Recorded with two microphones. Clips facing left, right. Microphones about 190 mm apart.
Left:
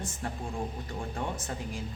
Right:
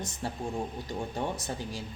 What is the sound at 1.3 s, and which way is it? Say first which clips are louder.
Speech: right 1 dB; 40° right (ahead or behind).